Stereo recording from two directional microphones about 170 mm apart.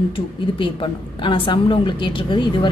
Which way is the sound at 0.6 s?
30° left (ahead or behind).